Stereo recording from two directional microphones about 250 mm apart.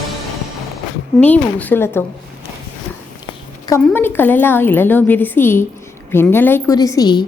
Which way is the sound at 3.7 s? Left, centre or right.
Centre.